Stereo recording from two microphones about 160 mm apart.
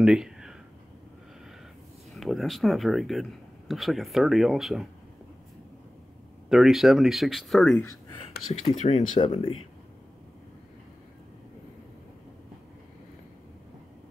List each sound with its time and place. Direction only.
0.0 s a sound: 5° right (ahead or behind)
2.1 s speech: centre (ahead or behind)
6.5 s speech: centre (ahead or behind)
8.7 s speech: 45° left (ahead or behind)
9.2 s speech: 35° left (ahead or behind)